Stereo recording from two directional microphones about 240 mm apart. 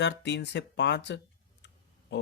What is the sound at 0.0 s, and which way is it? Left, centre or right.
Speech, left.